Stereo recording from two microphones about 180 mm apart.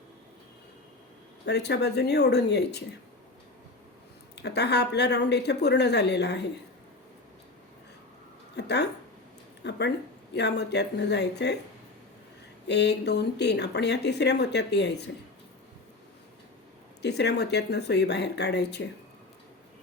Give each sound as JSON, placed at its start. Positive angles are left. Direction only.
{"t": 1.5, "sound": "speech", "side_deg": 65}
{"t": 4.4, "sound": "speech", "side_deg": 70}
{"t": 8.5, "sound": "speech", "side_deg": 70}
{"t": 12.6, "sound": "speech", "side_deg": 70}
{"t": 17.0, "sound": "speech", "side_deg": 70}